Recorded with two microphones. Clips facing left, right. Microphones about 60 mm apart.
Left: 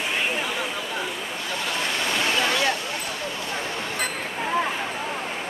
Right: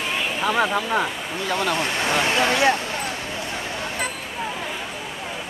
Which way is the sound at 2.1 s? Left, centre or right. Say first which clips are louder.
Right 4 dB; right.